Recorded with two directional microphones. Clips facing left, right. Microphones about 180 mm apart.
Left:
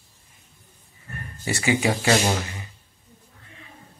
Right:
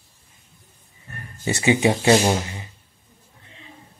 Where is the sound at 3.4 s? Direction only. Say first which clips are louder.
Right 1 dB; 25° right (ahead or behind).